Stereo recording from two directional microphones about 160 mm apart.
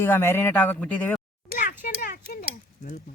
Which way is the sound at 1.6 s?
65° left (ahead or behind).